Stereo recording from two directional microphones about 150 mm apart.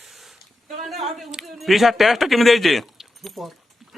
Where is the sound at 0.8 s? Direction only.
Centre (ahead or behind).